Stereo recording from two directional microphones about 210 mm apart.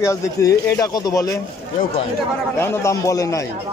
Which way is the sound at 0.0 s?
15° left (ahead or behind).